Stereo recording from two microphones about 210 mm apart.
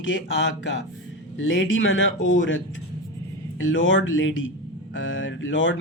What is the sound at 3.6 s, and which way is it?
Speech, 65° left (ahead or behind).